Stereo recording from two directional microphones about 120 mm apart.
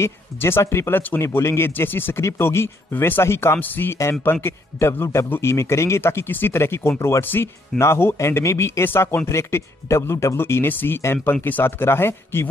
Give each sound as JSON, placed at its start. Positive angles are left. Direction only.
{"t": 0.0, "sound": "speech", "side_deg": 20}